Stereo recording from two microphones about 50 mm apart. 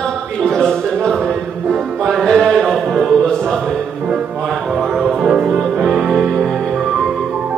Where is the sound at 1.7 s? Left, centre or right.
Centre.